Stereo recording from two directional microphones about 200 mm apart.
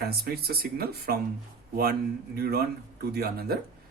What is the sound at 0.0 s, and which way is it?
Speech, 50° right (ahead or behind).